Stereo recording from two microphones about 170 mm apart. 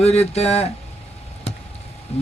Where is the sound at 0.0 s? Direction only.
40° left (ahead or behind).